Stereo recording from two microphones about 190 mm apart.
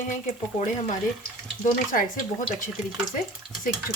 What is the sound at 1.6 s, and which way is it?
Speech, 45° left (ahead or behind).